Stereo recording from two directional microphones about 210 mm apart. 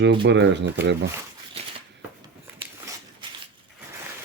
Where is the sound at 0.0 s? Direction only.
55° right (ahead or behind).